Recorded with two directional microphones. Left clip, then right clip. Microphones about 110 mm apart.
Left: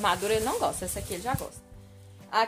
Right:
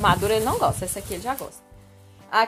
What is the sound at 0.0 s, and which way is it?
Speech, 45° right (ahead or behind).